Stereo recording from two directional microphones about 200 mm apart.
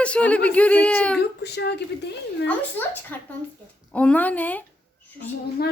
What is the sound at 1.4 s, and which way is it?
Speech, 55° left (ahead or behind).